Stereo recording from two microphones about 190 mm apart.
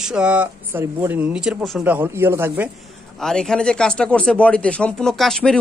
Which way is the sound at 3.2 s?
5° left (ahead or behind).